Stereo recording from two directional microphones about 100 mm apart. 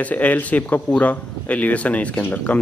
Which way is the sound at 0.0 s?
15° left (ahead or behind).